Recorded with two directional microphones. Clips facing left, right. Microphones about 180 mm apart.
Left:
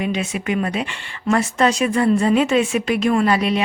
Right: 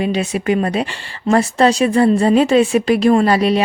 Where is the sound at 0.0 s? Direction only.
35° right (ahead or behind).